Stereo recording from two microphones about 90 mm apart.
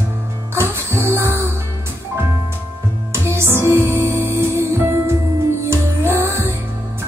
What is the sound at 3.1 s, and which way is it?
Music, 30° right (ahead or behind).